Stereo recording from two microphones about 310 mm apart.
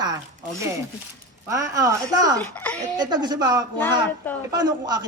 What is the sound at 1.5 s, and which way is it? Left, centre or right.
Speech, centre.